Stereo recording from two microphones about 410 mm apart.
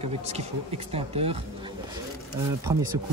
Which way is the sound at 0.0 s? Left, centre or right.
Centre.